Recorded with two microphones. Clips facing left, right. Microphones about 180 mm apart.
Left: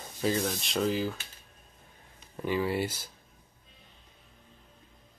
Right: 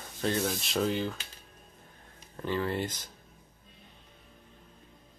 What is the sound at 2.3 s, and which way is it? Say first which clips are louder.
Speech: left 2 dB; 10° left (ahead or behind).